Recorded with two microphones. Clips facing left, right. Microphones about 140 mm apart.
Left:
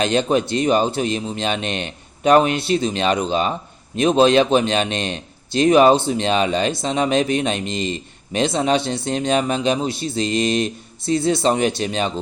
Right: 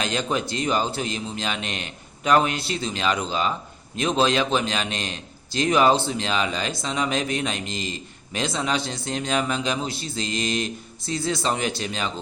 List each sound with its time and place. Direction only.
0.0 s a man's voice: 25° left (ahead or behind)